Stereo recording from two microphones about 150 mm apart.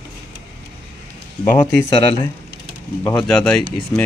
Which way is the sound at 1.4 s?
15° left (ahead or behind).